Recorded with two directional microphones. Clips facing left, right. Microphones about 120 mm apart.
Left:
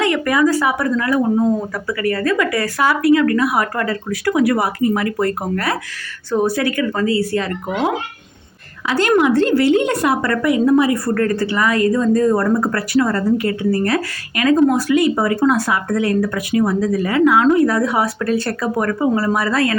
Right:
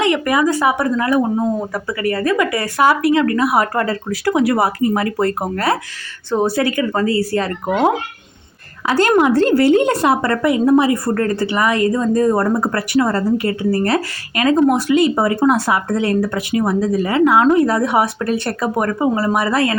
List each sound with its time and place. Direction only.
0.0 s a woman's voice: 20° right (ahead or behind); by 7.8 s 40° right (ahead or behind)
8.9 s a woman's voice: 40° right (ahead or behind); by 19.7 s 25° right (ahead or behind)